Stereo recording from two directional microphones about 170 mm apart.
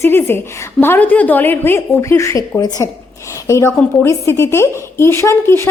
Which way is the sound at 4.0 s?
15° left (ahead or behind).